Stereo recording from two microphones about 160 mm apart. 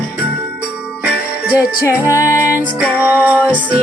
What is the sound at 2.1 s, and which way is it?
Music, 20° left (ahead or behind).